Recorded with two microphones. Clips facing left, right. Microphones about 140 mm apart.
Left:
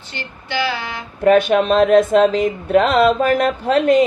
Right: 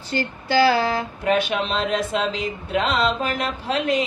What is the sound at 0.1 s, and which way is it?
Music, 35° right (ahead or behind).